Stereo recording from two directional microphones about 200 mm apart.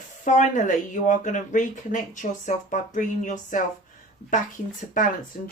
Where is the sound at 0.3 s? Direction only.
40° left (ahead or behind).